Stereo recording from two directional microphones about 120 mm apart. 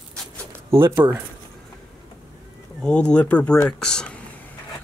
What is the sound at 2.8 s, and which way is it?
Speech, 10° left (ahead or behind).